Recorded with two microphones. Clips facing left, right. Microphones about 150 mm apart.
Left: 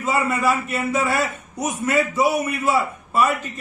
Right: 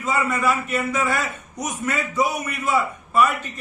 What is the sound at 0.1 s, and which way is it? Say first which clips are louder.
Speech: left 1 dB; 30° left (ahead or behind).